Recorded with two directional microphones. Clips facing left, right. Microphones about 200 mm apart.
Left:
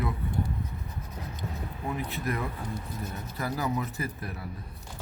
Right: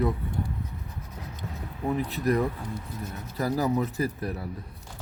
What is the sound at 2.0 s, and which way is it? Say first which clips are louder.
Speech: right 8 dB; 35° right (ahead or behind).